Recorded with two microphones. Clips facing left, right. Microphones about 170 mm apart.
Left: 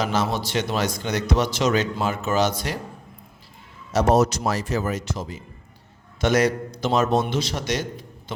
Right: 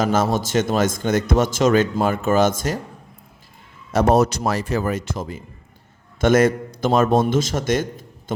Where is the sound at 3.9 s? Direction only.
55° right (ahead or behind).